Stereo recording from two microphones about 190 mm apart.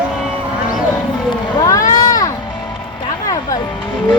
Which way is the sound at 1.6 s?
20° left (ahead or behind).